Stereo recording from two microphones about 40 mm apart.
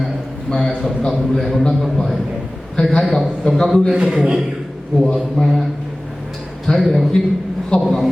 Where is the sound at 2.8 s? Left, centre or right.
Left.